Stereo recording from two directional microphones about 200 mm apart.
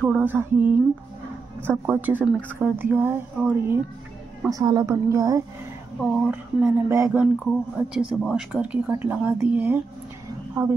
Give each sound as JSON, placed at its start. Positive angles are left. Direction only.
{"t": 0.2, "sound": "speech", "side_deg": -10}
{"t": 4.5, "sound": "speech", "side_deg": -20}
{"t": 5.9, "sound": "speech", "side_deg": -5}